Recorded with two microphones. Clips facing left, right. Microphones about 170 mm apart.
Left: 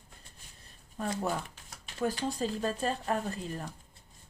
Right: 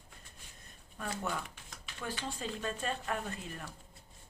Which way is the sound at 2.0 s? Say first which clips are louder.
Left 9 dB; 40° left (ahead or behind).